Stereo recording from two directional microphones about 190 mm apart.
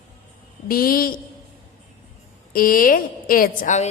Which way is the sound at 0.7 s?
50° left (ahead or behind).